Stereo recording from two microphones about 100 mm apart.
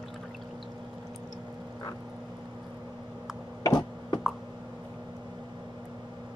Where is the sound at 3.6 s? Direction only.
45° left (ahead or behind).